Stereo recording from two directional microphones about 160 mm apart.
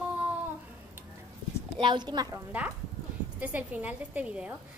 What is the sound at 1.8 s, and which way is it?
Speech, 30° right (ahead or behind).